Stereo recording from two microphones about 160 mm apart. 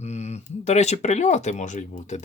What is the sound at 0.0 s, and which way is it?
Speech, 45° left (ahead or behind).